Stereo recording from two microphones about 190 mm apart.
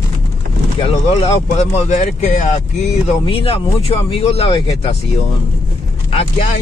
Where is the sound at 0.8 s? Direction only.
30° left (ahead or behind).